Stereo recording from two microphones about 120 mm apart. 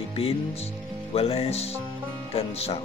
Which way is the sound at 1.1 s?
55° left (ahead or behind).